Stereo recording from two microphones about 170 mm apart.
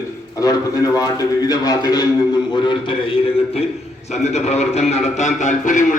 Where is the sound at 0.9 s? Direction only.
20° left (ahead or behind).